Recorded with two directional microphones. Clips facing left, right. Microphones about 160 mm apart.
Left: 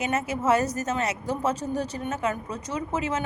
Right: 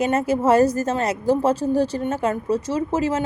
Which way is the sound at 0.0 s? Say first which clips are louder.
Right 7 dB; 35° right (ahead or behind).